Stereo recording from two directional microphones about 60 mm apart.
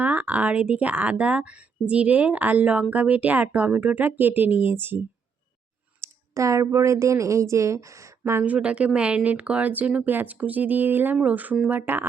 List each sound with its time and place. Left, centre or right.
0.0 s speech: right
6.0 s a woman's voice: right
8.2 s speech: right
8.4 s speech: centre